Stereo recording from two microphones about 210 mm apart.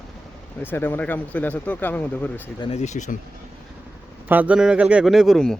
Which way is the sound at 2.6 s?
30° left (ahead or behind).